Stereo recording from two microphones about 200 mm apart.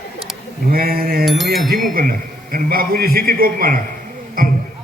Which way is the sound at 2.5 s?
45° right (ahead or behind).